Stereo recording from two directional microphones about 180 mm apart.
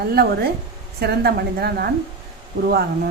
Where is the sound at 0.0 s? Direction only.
60° right (ahead or behind).